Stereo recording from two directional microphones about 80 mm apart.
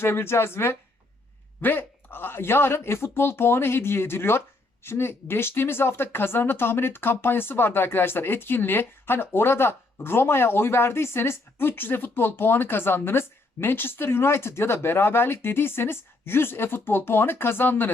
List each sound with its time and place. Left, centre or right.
0.0 s speech: left